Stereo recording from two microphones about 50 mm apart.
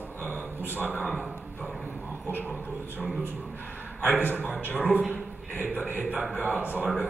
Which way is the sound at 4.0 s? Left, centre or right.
Left.